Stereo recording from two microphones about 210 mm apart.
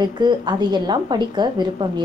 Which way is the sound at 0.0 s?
20° right (ahead or behind).